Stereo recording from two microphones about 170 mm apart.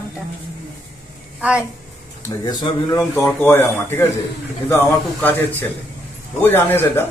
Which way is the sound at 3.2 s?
15° left (ahead or behind).